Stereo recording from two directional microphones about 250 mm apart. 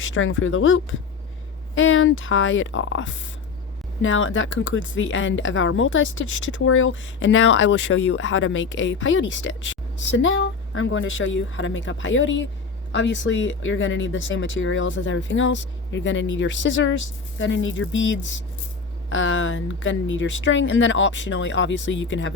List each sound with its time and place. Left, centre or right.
0.0 s speech: left